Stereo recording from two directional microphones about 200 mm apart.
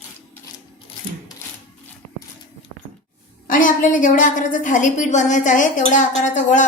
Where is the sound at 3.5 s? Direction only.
40° left (ahead or behind).